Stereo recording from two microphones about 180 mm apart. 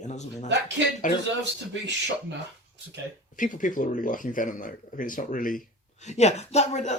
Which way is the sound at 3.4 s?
45° left (ahead or behind).